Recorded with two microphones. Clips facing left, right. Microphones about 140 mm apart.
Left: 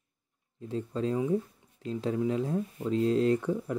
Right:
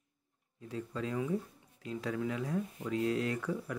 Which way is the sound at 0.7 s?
30° left (ahead or behind).